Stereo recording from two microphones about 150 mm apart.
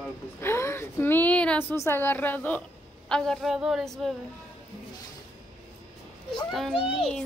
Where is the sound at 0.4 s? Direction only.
15° left (ahead or behind); by 4.1 s centre (ahead or behind).